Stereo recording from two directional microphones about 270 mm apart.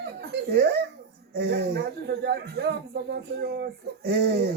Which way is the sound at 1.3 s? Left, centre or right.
Right.